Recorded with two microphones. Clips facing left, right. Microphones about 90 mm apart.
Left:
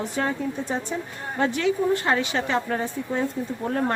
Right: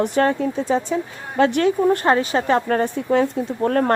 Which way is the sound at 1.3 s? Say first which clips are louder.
Right 7 dB; 90° right.